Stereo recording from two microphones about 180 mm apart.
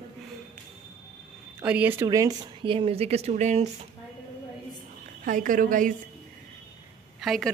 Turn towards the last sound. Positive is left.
turn(degrees=0)  # may be behind; listen again after turning